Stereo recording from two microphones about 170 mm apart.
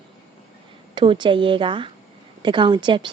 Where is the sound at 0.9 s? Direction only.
30° right (ahead or behind).